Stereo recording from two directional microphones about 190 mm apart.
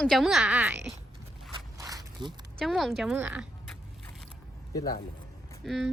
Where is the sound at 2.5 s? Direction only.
Centre (ahead or behind).